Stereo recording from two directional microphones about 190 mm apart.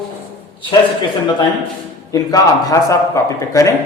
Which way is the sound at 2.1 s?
20° left (ahead or behind).